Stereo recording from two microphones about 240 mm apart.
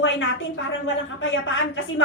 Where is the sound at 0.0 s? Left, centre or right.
Left.